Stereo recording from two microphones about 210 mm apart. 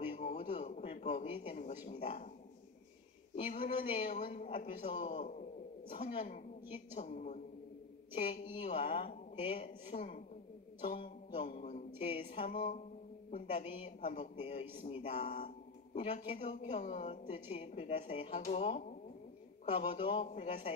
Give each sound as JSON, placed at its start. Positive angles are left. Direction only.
{"t": 0.1, "sound": "a sound", "side_deg": 35}
{"t": 1.2, "sound": "a man's voice", "side_deg": 25}
{"t": 3.6, "sound": "a woman's voice", "side_deg": 35}
{"t": 8.5, "sound": "a man's voice", "side_deg": 30}
{"t": 15.4, "sound": "a sound", "side_deg": 30}
{"t": 16.3, "sound": "a woman's voice", "side_deg": 35}